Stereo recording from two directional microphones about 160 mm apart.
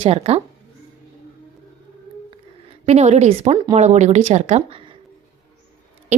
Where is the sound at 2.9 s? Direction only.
45° right (ahead or behind).